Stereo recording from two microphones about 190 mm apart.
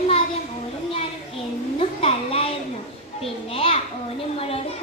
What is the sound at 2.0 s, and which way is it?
A child's voice, 30° left (ahead or behind).